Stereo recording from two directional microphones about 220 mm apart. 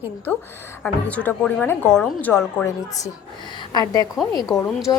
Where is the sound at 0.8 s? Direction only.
5° left (ahead or behind).